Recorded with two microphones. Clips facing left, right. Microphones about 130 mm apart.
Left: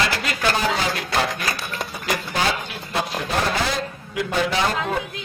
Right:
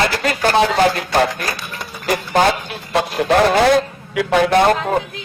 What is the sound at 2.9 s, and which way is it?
A man's voice, 75° right (ahead or behind).